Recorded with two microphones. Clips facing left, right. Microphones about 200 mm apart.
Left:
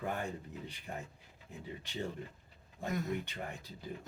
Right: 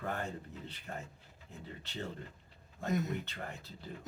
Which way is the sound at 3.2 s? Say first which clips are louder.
Left 1 dB; 15° left (ahead or behind).